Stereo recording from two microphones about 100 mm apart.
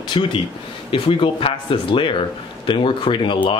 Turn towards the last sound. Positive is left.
turn(degrees=55)  # may be behind; listen again after turning